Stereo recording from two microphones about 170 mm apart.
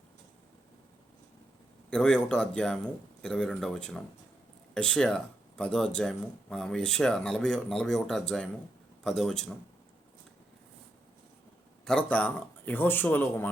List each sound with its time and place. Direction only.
1.9 s speech: 5° left (ahead or behind)
11.9 s speech: 10° left (ahead or behind)